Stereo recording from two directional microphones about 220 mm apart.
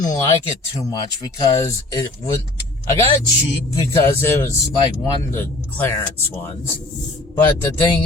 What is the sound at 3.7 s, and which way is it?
Speech, 15° left (ahead or behind).